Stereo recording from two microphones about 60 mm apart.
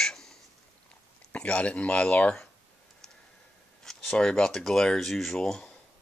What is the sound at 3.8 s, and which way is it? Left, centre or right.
Speech, centre.